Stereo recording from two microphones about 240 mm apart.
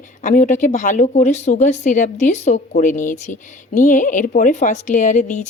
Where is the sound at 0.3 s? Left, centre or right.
Left.